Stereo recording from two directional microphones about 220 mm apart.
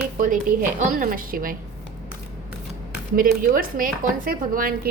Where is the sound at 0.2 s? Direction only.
35° right (ahead or behind).